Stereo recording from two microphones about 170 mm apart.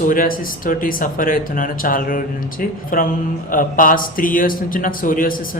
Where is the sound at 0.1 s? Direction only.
55° left (ahead or behind).